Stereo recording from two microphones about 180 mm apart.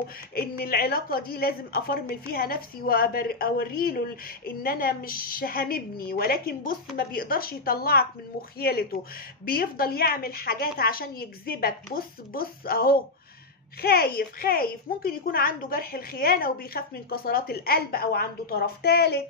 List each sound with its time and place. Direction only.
0.3 s a woman's voice: 60° left (ahead or behind)